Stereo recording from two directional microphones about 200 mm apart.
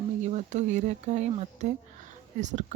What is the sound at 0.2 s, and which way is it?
Speech, 35° right (ahead or behind).